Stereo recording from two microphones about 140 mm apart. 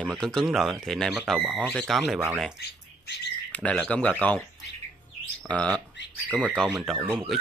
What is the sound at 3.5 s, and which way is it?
Speech, 10° left (ahead or behind).